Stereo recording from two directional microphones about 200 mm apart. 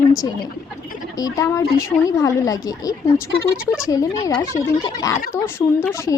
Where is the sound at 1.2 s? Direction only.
15° left (ahead or behind).